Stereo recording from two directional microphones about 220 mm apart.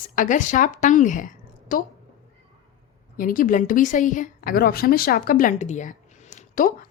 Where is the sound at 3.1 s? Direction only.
40° left (ahead or behind).